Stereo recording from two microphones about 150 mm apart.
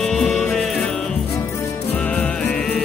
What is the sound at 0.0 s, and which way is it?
Music, 5° left (ahead or behind).